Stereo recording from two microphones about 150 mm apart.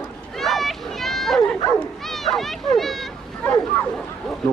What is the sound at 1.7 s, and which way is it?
Bow-wow, centre (ahead or behind).